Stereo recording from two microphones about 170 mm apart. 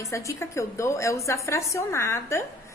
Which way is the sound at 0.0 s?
20° left (ahead or behind).